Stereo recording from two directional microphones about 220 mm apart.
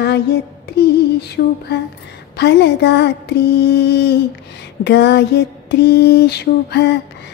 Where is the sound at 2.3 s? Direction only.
50° left (ahead or behind).